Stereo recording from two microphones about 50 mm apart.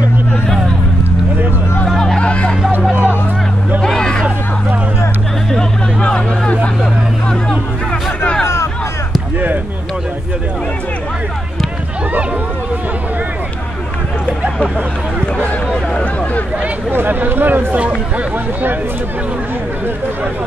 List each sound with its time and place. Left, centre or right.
2.1 s hubbub: left
2.9 s hubbub: right
3.8 s hubbub: centre
5.5 s hubbub: centre
15.7 s a sound: left
16.9 s a sound: right
17.7 s hubbub: right